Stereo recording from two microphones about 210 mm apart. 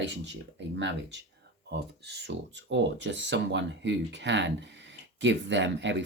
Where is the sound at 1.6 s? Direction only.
55° right (ahead or behind).